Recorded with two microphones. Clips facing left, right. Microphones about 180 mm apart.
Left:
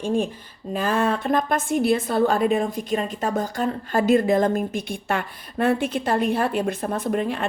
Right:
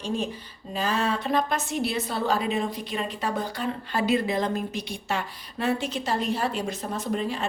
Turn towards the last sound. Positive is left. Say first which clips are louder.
# left 4 dB
turn(degrees=55)  # may be behind; listen again after turning